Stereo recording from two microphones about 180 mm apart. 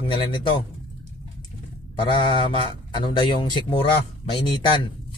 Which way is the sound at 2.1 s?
25° left (ahead or behind).